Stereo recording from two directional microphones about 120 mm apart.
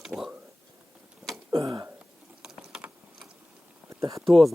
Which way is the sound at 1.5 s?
30° right (ahead or behind).